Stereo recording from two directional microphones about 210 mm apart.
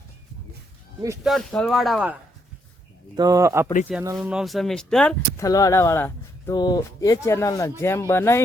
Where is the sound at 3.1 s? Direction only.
15° right (ahead or behind).